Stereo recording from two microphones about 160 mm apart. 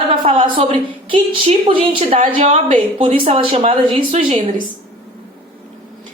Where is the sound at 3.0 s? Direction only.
40° right (ahead or behind).